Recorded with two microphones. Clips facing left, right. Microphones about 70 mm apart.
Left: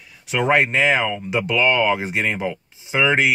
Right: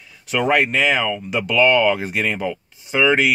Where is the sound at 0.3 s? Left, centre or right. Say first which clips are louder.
Even; left.